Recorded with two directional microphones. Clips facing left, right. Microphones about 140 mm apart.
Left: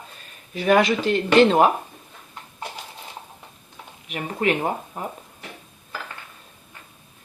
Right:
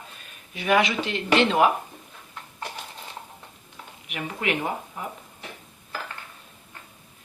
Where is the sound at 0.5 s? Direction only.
40° left (ahead or behind).